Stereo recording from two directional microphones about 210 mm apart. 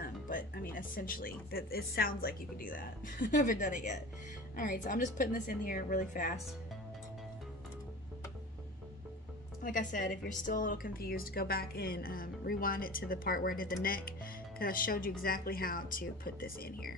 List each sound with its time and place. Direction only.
0.0 s speech: 40° left (ahead or behind)
9.6 s a woman's voice: 40° left (ahead or behind)